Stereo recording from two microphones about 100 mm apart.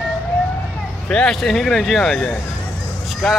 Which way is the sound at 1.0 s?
10° left (ahead or behind).